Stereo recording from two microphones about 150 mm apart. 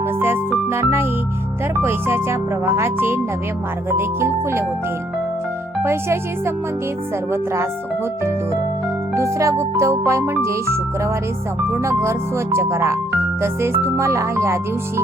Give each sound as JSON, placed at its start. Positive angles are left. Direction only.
{"t": 0.7, "sound": "speech", "side_deg": -15}
{"t": 5.8, "sound": "speech", "side_deg": -15}
{"t": 9.1, "sound": "music", "side_deg": -20}
{"t": 11.7, "sound": "speech", "side_deg": -15}
{"t": 12.5, "sound": "music", "side_deg": -20}
{"t": 13.4, "sound": "speech", "side_deg": -15}